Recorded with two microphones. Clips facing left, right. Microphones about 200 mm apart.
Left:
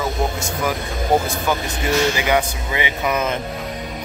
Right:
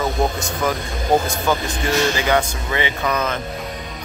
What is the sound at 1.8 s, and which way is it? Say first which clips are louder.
Speech: left 1 dB; 15° left (ahead or behind).